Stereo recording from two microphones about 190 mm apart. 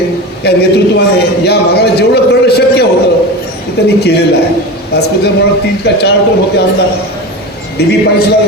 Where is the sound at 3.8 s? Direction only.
60° left (ahead or behind).